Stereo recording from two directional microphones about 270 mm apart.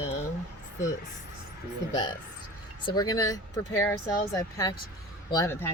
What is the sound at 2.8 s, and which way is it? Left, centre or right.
Speech, centre.